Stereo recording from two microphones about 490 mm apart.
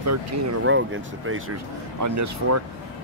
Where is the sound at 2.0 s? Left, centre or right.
Right.